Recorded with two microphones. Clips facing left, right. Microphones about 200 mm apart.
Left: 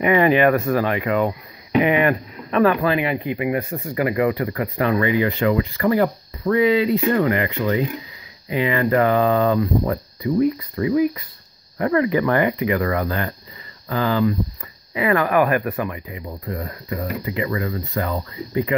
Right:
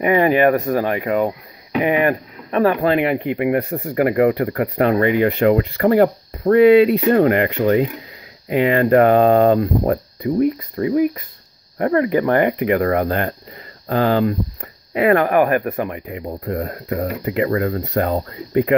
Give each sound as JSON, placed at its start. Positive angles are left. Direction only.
{"t": 0.0, "sound": "speech", "side_deg": -40}
{"t": 10.8, "sound": "speech", "side_deg": -35}
{"t": 16.1, "sound": "speech", "side_deg": -60}
{"t": 17.5, "sound": "speech", "side_deg": -50}